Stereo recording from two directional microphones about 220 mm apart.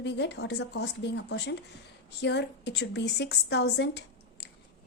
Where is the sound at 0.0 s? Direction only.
50° left (ahead or behind).